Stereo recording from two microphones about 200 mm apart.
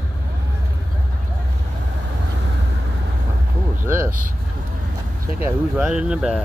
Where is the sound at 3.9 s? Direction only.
10° right (ahead or behind).